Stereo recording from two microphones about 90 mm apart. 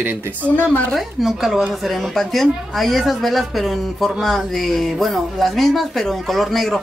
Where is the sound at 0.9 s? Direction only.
Centre (ahead or behind).